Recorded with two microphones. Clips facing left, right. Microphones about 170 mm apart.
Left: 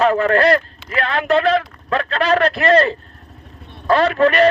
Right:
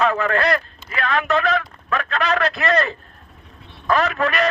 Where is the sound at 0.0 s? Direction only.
35° left (ahead or behind).